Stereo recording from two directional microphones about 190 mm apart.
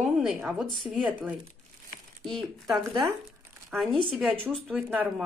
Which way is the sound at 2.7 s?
20° right (ahead or behind).